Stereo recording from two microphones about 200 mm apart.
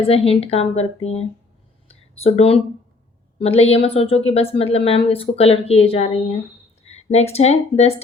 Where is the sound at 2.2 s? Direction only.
30° left (ahead or behind).